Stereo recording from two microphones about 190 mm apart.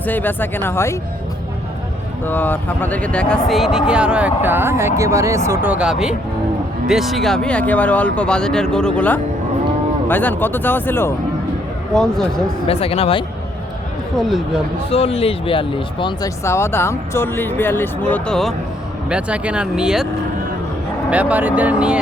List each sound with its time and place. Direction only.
0.0 s speech: 10° left (ahead or behind)
2.2 s speech: 10° left (ahead or behind)
12.6 s speech: 30° left (ahead or behind)
14.2 s speech: centre (ahead or behind)
14.8 s speech: 30° left (ahead or behind); by 20.1 s 5° right (ahead or behind)
21.1 s speech: 5° right (ahead or behind)